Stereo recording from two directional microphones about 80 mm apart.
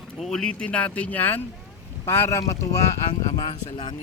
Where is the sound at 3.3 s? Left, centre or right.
Left.